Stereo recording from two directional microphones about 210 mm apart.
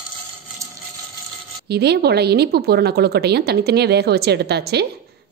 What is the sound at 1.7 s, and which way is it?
A woman's voice, 50° right (ahead or behind).